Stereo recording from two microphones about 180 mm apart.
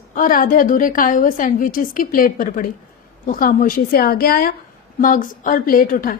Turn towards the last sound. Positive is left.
turn(degrees=50)  # may be behind; listen again after turning